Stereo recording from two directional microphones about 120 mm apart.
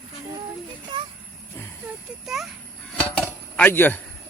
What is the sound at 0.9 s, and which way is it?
Vehicle, 40° right (ahead or behind).